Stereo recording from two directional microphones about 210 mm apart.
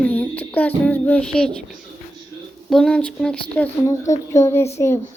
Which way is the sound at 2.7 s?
5° left (ahead or behind).